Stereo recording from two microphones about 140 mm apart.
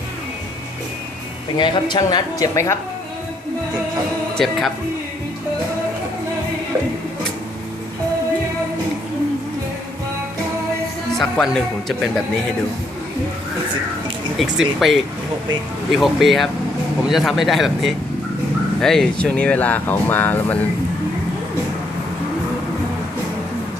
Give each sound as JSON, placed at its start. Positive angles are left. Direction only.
{"t": 1.5, "sound": "speech", "side_deg": 35}
{"t": 4.4, "sound": "speech", "side_deg": 0}
{"t": 11.2, "sound": "speech", "side_deg": 5}
{"t": 14.3, "sound": "speech", "side_deg": 0}